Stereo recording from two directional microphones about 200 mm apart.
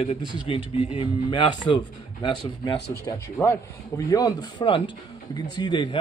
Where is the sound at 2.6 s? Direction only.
15° left (ahead or behind).